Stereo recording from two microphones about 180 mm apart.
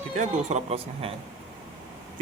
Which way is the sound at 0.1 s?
40° right (ahead or behind).